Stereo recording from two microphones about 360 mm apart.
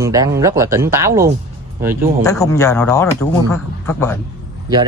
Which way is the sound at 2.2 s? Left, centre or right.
Centre.